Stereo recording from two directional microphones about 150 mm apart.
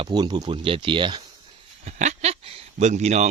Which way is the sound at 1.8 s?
50° right (ahead or behind).